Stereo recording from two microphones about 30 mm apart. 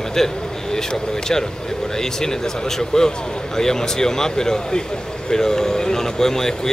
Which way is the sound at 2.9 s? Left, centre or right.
Left.